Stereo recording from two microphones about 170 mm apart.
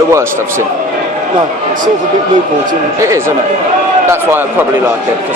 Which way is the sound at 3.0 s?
15° right (ahead or behind).